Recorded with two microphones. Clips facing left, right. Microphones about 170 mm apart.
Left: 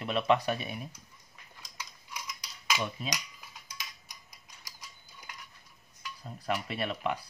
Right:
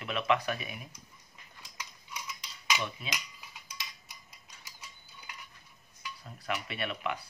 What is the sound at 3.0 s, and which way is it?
Cutlery, 40° left (ahead or behind).